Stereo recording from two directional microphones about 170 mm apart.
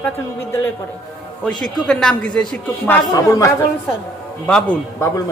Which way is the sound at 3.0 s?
20° left (ahead or behind).